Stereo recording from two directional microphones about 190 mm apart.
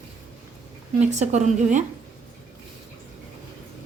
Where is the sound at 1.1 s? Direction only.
35° right (ahead or behind).